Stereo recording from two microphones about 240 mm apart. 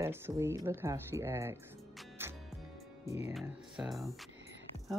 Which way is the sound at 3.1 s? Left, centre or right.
Centre.